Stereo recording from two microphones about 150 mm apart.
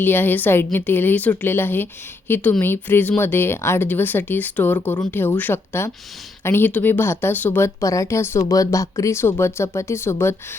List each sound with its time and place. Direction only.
0.0 s a woman's voice: 15° left (ahead or behind)